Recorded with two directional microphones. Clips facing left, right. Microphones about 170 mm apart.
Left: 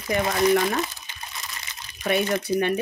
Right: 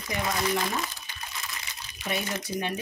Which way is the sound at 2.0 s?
65° left (ahead or behind).